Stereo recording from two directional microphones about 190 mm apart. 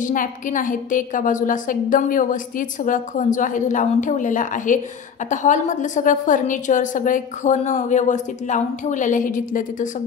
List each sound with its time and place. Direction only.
0.0 s a woman's voice: 45° left (ahead or behind)